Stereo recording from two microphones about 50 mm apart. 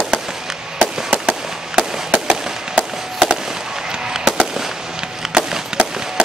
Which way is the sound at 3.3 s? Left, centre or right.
Centre.